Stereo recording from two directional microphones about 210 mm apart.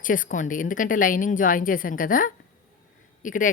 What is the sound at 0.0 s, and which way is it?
A woman's voice, 40° left (ahead or behind).